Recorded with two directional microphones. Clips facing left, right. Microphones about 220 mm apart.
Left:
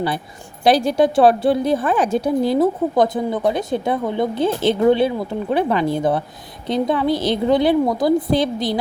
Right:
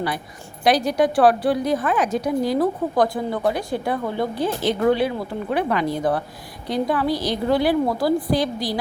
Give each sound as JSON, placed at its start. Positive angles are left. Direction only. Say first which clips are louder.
{"t": 0.6, "sound": "speech", "louder": "left 3 dB", "side_deg": 30}